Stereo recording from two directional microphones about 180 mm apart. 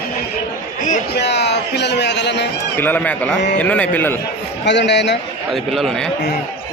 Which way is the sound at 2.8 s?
10° left (ahead or behind).